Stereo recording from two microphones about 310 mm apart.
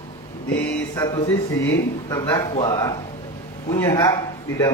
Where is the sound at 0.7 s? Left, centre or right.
Centre.